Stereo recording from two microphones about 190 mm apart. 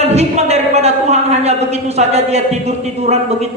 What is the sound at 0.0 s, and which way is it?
A man's voice, 35° right (ahead or behind).